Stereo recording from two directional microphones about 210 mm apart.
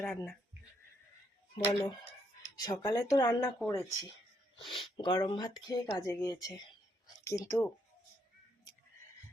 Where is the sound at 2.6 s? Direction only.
20° left (ahead or behind).